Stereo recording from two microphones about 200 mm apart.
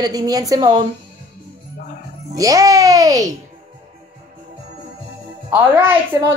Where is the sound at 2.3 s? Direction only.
15° right (ahead or behind).